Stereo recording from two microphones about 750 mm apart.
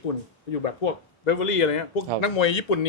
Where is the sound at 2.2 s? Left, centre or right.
Left.